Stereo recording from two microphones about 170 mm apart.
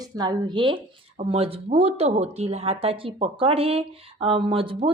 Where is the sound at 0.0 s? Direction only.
25° right (ahead or behind).